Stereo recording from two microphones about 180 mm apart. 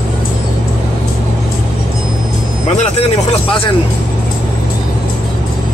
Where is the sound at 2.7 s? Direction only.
35° left (ahead or behind).